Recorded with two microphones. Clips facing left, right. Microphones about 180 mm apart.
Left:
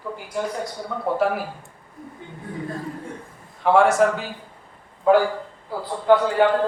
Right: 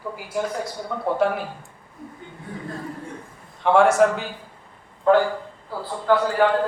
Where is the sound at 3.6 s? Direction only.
Centre (ahead or behind).